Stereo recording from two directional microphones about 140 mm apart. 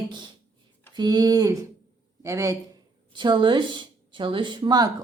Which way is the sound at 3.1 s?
35° right (ahead or behind).